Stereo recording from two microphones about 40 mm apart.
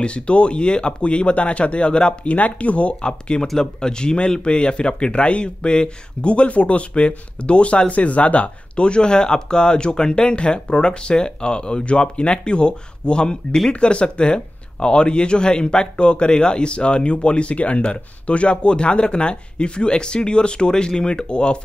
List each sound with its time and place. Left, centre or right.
0.0 s speech: left
2.3 s speech: left